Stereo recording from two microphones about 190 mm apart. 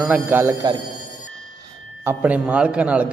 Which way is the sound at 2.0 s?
10° right (ahead or behind).